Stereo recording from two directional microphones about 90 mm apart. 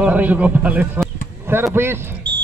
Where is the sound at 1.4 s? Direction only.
25° right (ahead or behind).